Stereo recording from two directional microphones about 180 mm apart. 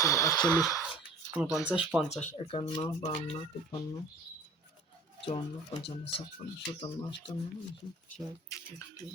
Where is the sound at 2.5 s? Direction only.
30° left (ahead or behind).